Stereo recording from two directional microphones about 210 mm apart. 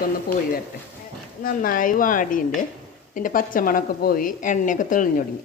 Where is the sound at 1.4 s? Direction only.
40° left (ahead or behind).